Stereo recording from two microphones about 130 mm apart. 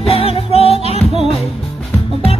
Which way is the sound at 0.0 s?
50° left (ahead or behind).